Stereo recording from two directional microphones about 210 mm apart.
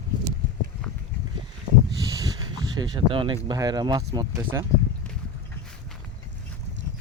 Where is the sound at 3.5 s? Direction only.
20° right (ahead or behind).